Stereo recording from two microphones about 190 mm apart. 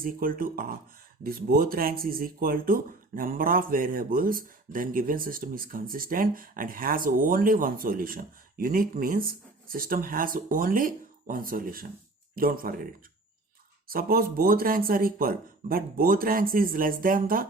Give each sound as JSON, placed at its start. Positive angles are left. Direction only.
{"t": 0.0, "sound": "speech", "side_deg": -50}